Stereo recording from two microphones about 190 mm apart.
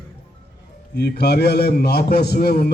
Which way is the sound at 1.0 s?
60° left (ahead or behind).